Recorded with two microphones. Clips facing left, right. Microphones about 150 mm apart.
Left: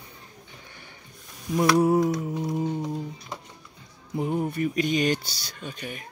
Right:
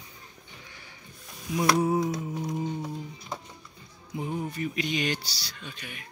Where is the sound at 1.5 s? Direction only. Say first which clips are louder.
Left 4 dB; 65° left (ahead or behind).